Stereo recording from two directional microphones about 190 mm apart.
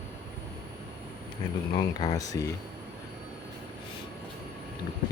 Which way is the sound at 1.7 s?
25° left (ahead or behind).